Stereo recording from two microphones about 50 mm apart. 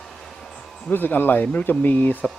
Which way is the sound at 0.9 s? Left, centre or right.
Left.